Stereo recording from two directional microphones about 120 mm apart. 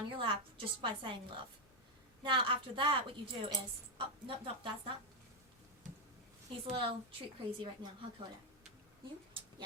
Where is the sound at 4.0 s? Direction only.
45° right (ahead or behind).